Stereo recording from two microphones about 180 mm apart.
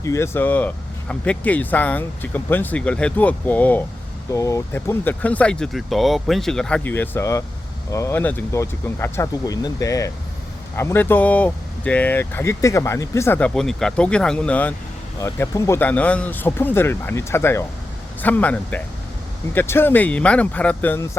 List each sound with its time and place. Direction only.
0.0 s speech: 15° left (ahead or behind)